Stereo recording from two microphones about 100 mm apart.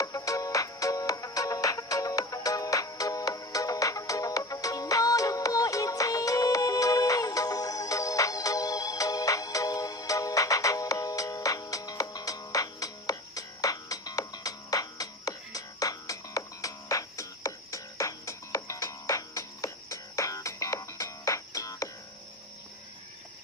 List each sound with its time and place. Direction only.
0.0 s music: 35° left (ahead or behind)